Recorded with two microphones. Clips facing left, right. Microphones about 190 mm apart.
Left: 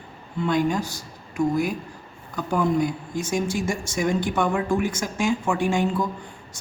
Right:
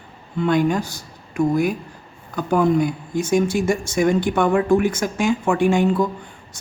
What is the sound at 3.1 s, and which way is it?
Speech, 60° right (ahead or behind).